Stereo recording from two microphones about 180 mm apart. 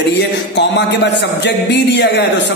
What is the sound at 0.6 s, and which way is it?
A man's voice, 75° left (ahead or behind).